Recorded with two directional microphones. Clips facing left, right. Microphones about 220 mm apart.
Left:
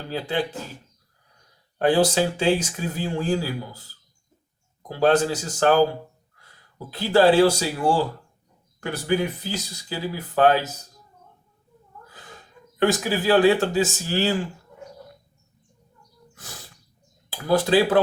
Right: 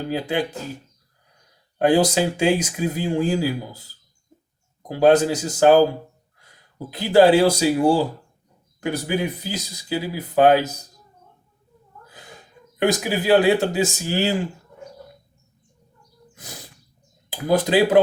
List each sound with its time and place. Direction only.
0.1 s speech: 15° right (ahead or behind)
1.8 s speech: 15° right (ahead or behind)
4.9 s speech: 15° right (ahead or behind)
6.9 s speech: 15° right (ahead or behind)
12.1 s a sound: 15° right (ahead or behind)
12.8 s speech: 15° right (ahead or behind)
17.2 s speech: 15° right (ahead or behind)